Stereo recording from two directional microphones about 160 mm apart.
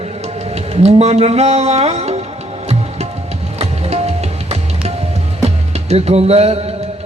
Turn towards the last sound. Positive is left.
turn(degrees=-40)  # may be behind; listen again after turning